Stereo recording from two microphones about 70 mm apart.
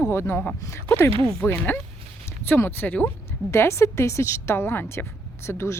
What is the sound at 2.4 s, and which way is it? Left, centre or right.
Speech, left.